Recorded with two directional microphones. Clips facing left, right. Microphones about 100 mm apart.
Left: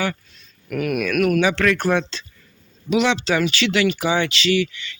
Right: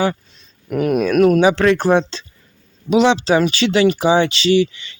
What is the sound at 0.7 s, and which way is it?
Speech, 30° right (ahead or behind).